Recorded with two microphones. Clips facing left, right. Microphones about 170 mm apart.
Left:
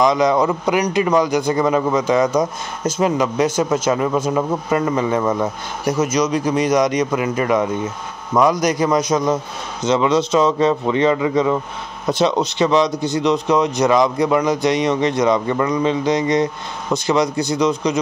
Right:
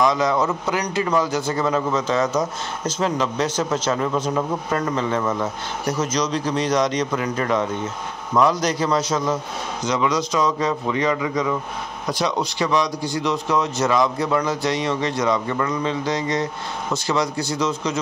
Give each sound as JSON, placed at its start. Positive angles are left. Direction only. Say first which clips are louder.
{"t": 0.0, "sound": "a man's voice", "louder": "left 4 dB", "side_deg": 20}